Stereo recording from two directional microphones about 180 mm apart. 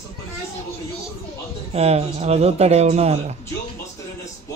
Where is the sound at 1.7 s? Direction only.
35° right (ahead or behind).